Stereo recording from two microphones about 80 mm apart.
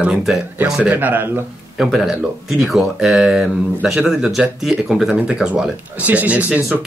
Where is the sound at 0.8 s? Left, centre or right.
Right.